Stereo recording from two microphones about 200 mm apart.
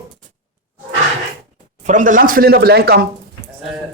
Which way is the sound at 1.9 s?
40° right (ahead or behind).